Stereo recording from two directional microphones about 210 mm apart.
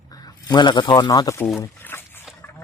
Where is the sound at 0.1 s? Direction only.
15° left (ahead or behind).